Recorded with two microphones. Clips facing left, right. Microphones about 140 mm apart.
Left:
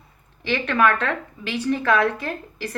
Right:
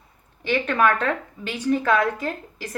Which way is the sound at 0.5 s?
10° right (ahead or behind).